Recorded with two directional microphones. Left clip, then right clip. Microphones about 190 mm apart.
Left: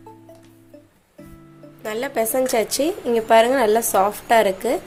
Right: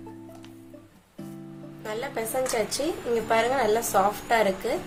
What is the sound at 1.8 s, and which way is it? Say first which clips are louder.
A woman's voice: left 8 dB; 50° left (ahead or behind).